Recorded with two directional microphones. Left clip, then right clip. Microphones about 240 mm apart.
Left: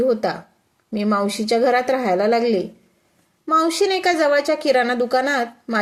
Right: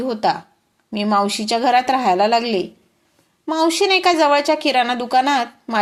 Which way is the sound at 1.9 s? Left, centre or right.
Right.